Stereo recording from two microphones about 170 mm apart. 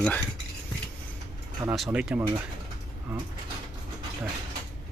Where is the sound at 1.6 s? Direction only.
10° right (ahead or behind).